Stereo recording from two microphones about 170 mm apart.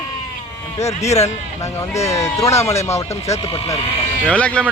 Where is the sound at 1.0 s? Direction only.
40° left (ahead or behind).